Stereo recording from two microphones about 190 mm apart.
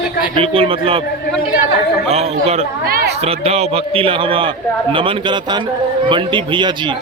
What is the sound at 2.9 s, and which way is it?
Speech, 55° right (ahead or behind).